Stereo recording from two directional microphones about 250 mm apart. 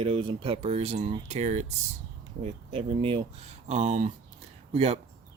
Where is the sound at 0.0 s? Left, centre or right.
Right.